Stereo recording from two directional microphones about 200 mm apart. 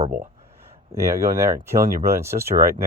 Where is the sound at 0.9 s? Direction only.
15° right (ahead or behind).